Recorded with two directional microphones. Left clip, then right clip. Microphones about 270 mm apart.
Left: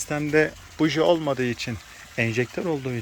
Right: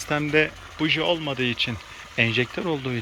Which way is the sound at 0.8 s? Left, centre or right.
Left.